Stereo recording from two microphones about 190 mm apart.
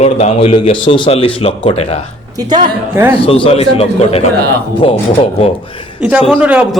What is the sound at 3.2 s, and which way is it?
A man's voice, 30° left (ahead or behind).